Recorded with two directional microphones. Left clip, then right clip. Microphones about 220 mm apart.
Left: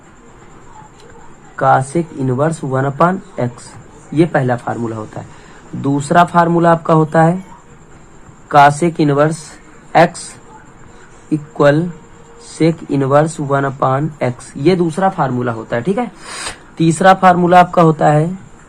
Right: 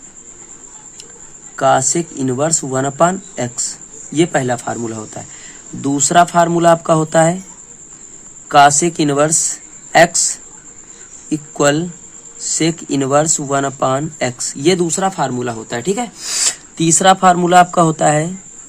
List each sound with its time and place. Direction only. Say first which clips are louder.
1.6 s speech: left 1 dB; 20° right (ahead or behind)
8.4 s speech: left 1 dB; 20° right (ahead or behind)
11.3 s speech: left 3 dB; 20° right (ahead or behind)